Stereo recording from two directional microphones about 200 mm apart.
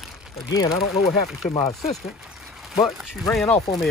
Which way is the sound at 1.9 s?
Centre (ahead or behind).